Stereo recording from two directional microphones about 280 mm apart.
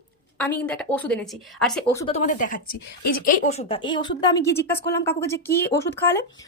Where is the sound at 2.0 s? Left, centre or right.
Left.